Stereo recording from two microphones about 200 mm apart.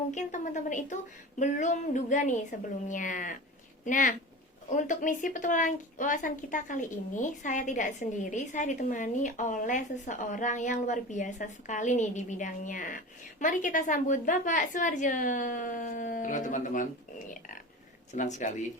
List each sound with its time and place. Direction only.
0.1 s a woman's voice: 40° left (ahead or behind)
17.3 s pig: 40° left (ahead or behind)
18.1 s a woman's voice: 35° left (ahead or behind)